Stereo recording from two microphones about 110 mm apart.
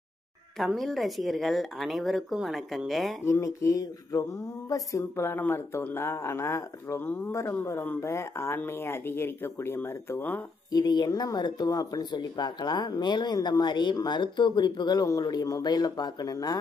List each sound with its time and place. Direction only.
0.7 s speech: centre (ahead or behind)
3.3 s speech: 30° left (ahead or behind)
10.7 s speech: 40° left (ahead or behind)